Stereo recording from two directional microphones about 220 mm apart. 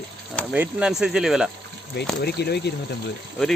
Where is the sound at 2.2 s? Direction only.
45° left (ahead or behind).